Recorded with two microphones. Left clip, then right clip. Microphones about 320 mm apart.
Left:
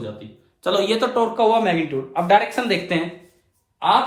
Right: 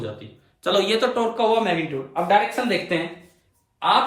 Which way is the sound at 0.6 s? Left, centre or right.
Centre.